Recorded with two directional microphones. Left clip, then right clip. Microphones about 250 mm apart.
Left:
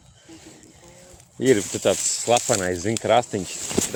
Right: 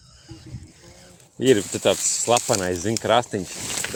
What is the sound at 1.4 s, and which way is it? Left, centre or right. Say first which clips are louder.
Speech: right 1 dB; centre.